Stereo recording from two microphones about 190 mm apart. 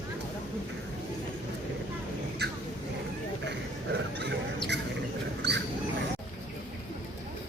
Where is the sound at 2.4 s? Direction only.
60° right (ahead or behind).